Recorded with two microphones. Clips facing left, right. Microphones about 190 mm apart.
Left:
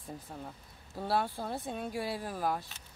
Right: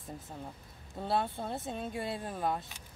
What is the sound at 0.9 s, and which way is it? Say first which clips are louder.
Speech: even; 5° left (ahead or behind).